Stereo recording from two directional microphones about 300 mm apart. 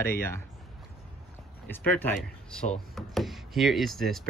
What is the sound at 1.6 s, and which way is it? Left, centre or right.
Speech, centre.